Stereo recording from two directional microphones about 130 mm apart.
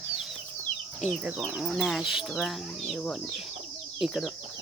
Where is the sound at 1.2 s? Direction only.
10° right (ahead or behind).